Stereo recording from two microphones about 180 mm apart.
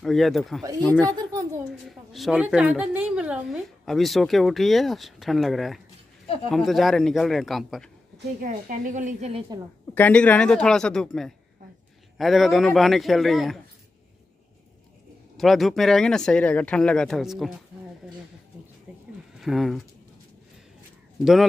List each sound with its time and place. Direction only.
0.0 s a woman's voice: centre (ahead or behind)
8.4 s a woman's voice: 45° right (ahead or behind)
9.9 s speech: 10° left (ahead or behind)
15.3 s speech: centre (ahead or behind)
18.9 s a sound: 5° right (ahead or behind)
19.4 s speech: centre (ahead or behind)
21.2 s speech: centre (ahead or behind)